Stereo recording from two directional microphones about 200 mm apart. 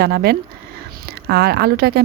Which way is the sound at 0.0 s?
55° right (ahead or behind).